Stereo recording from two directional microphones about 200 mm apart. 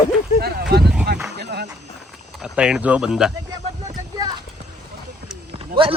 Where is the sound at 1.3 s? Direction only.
55° right (ahead or behind).